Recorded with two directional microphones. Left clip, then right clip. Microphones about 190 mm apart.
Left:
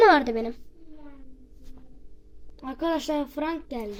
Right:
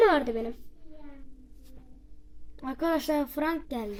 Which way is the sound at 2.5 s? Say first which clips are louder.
Left 1 dB; 15° right (ahead or behind).